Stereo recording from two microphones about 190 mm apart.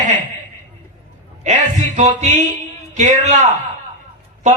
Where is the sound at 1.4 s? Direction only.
40° right (ahead or behind).